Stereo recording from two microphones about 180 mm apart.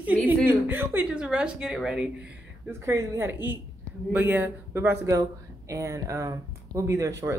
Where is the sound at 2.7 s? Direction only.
15° right (ahead or behind).